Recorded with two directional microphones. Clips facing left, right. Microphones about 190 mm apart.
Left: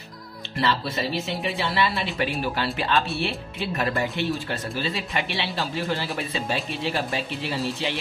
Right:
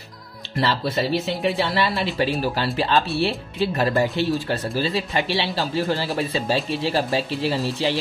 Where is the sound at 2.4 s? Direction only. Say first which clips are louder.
Right 3 dB; 35° right (ahead or behind).